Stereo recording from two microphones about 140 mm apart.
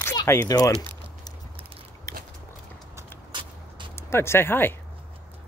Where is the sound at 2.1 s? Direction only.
20° left (ahead or behind).